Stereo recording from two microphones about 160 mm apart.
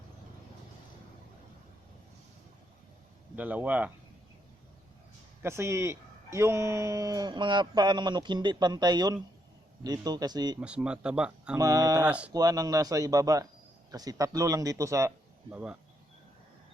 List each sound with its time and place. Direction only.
3.3 s speech: 10° right (ahead or behind)
5.4 s speech: 15° right (ahead or behind)
10.6 s speech: 5° right (ahead or behind)
11.5 s speech: 20° right (ahead or behind)
12.0 s speech: 5° right (ahead or behind)
12.3 s speech: 20° right (ahead or behind)